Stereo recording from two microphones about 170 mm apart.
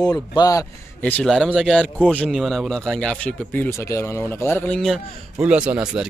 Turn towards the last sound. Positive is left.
turn(degrees=-5)  # may be behind; listen again after turning